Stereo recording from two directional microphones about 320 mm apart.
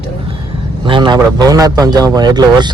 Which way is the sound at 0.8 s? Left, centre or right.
Centre.